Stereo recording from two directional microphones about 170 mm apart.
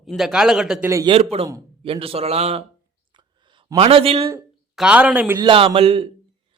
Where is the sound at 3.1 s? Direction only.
30° right (ahead or behind).